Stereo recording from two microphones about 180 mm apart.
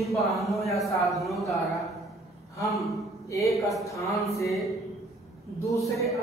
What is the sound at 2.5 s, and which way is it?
Speech, 15° left (ahead or behind).